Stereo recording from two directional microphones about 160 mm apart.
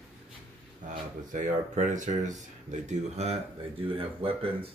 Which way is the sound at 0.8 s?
55° right (ahead or behind).